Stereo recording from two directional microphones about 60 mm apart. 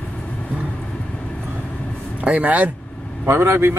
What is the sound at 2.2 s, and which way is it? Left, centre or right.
Speech, right.